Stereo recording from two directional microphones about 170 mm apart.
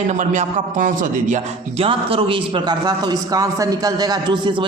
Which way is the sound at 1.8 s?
30° right (ahead or behind).